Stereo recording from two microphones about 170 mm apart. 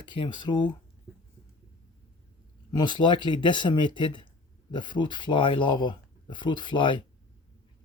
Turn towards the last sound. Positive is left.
turn(degrees=30)  # may be behind; listen again after turning